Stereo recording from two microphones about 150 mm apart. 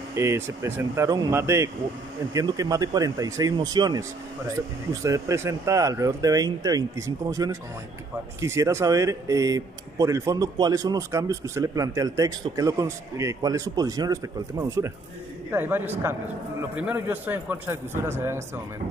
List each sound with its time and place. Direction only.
0.1 s a man's voice: 20° right (ahead or behind)